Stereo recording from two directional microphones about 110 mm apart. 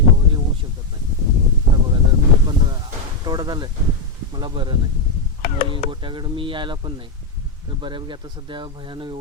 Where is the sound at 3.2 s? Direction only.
40° right (ahead or behind).